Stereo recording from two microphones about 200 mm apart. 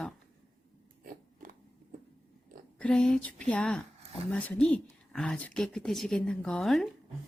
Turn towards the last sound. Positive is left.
turn(degrees=0)  # may be behind; listen again after turning